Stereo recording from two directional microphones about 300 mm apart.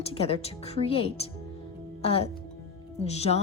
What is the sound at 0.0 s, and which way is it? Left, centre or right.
A woman's voice, centre.